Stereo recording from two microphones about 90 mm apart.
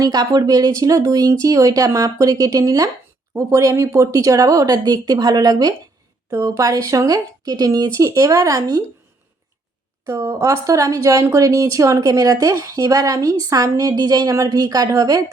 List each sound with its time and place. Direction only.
0.0 s speech: 50° right (ahead or behind)
10.1 s speech: 35° right (ahead or behind)